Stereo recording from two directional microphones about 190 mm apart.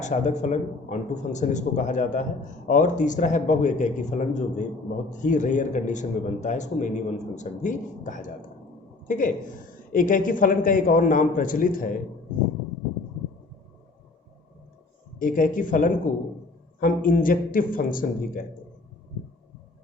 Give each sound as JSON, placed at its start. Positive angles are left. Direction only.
{"t": 0.0, "sound": "a man's voice", "side_deg": 40}
{"t": 15.2, "sound": "a man's voice", "side_deg": 45}